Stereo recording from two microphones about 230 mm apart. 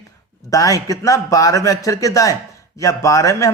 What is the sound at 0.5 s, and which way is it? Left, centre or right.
A man's voice, centre.